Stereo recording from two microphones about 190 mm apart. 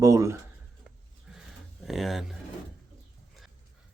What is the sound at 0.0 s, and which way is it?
Speech, 15° right (ahead or behind).